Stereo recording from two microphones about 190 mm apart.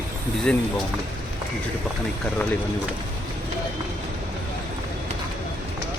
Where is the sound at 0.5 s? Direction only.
5° left (ahead or behind).